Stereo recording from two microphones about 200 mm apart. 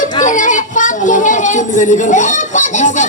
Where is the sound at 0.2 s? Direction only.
40° left (ahead or behind).